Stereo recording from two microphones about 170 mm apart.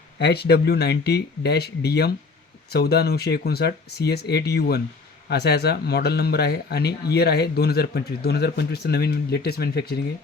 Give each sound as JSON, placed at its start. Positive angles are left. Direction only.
{"t": 0.2, "sound": "speech", "side_deg": 75}